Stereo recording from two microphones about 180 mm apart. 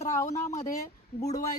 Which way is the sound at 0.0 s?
15° left (ahead or behind).